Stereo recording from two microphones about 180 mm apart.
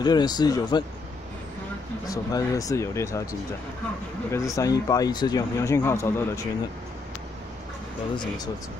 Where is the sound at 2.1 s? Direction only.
20° left (ahead or behind).